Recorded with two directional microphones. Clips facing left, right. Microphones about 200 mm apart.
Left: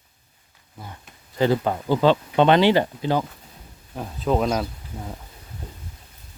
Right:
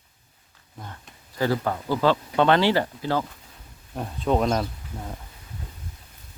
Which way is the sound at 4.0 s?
Centre (ahead or behind).